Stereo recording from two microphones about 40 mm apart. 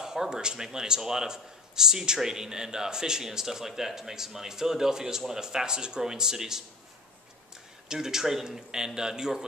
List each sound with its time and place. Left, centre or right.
0.0 s a sound: centre
0.4 s speech: centre
7.9 s speech: centre